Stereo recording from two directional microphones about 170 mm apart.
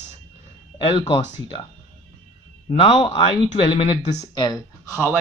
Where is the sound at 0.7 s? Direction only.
30° left (ahead or behind).